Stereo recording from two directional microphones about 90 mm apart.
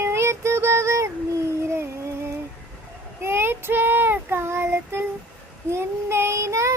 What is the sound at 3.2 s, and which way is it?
Child singing, 25° right (ahead or behind).